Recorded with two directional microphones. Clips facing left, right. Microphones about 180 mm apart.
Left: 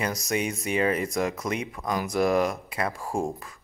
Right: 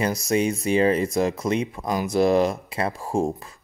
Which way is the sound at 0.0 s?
30° right (ahead or behind).